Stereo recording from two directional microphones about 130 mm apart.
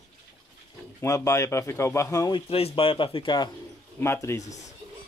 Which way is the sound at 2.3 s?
45° left (ahead or behind).